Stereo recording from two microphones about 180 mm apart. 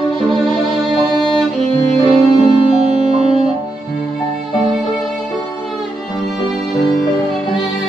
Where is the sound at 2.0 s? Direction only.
30° left (ahead or behind).